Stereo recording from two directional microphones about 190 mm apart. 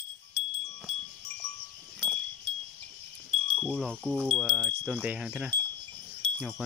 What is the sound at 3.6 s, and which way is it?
Speech, 5° left (ahead or behind).